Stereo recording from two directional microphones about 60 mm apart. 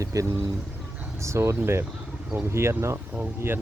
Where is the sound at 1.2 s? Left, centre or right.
Right.